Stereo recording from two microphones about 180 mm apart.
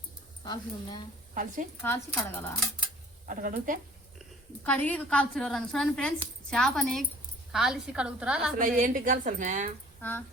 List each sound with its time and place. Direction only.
0.4 s speech: 25° left (ahead or behind)
1.3 s a woman's voice: 50° right (ahead or behind)
1.8 s a woman's voice: 15° left (ahead or behind)
3.2 s a woman's voice: 50° right (ahead or behind)
4.6 s a woman's voice: 10° left (ahead or behind)
8.5 s a woman's voice: 50° right (ahead or behind)
10.0 s a woman's voice: 10° left (ahead or behind)